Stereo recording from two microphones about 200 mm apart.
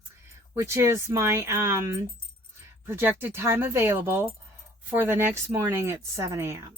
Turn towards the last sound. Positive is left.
turn(degrees=-15)  # may be behind; listen again after turning